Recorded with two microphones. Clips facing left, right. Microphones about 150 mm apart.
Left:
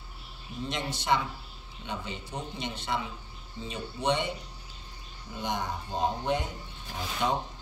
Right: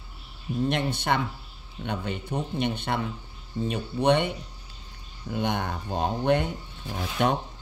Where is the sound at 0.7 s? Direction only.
60° right (ahead or behind).